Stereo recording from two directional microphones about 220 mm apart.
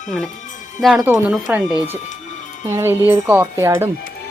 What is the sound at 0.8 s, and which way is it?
Speech, centre (ahead or behind).